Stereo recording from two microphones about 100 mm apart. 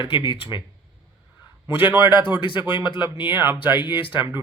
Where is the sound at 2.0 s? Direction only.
50° left (ahead or behind).